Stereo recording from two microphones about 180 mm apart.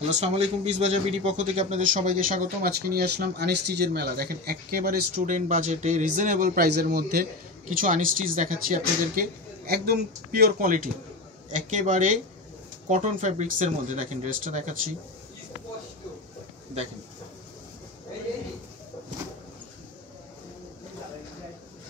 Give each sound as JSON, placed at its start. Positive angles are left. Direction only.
{"t": 0.1, "sound": "a man's voice", "side_deg": -40}
{"t": 11.5, "sound": "a man's voice", "side_deg": -45}